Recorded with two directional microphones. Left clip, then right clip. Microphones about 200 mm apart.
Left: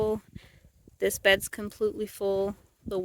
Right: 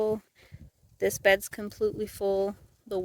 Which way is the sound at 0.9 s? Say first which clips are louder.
Even; 5° left (ahead or behind).